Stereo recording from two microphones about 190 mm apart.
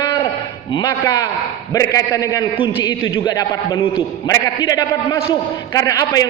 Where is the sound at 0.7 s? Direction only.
20° left (ahead or behind).